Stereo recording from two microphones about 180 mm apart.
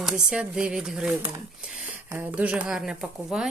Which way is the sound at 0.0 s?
5° right (ahead or behind).